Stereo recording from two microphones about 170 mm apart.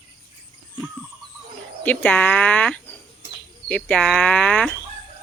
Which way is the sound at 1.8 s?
10° left (ahead or behind).